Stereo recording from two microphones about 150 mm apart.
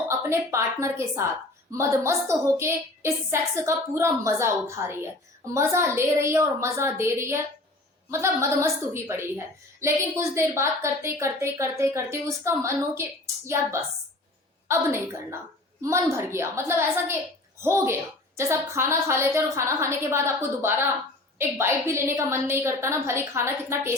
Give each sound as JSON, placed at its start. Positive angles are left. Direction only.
{"t": 0.1, "sound": "a woman's voice", "side_deg": -20}